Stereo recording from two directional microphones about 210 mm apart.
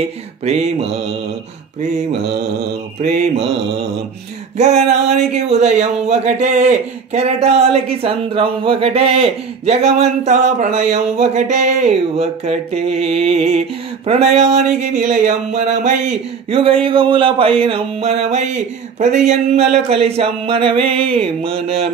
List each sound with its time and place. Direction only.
0.5 s speech: 30° right (ahead or behind)
2.2 s mantra: 50° right (ahead or behind)
4.6 s speech: 35° right (ahead or behind)
14.0 s a sound: 30° right (ahead or behind)